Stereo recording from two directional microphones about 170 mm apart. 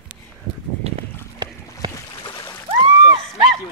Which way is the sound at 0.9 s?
35° right (ahead or behind).